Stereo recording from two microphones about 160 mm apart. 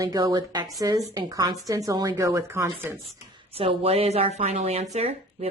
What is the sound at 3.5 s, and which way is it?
Speech, 35° right (ahead or behind).